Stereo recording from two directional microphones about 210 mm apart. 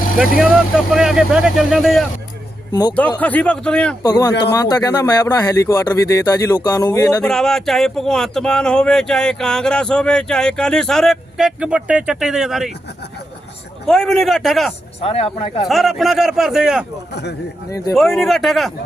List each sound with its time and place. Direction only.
0.3 s speech: 5° right (ahead or behind)
3.2 s speech: 5° left (ahead or behind)
4.0 s speech: 20° left (ahead or behind)
7.3 s speech: centre (ahead or behind)
13.8 s speech: centre (ahead or behind)
15.0 s speech: 30° left (ahead or behind)
15.6 s speech: centre (ahead or behind)
17.7 s speech: 15° left (ahead or behind)
17.9 s speech: centre (ahead or behind)